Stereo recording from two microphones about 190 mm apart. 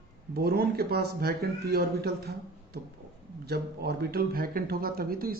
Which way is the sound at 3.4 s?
55° right (ahead or behind).